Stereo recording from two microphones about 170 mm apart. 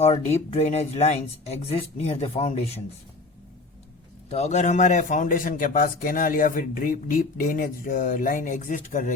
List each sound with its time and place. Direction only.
0.0 s speech: 40° left (ahead or behind)
4.3 s a man's voice: 40° left (ahead or behind)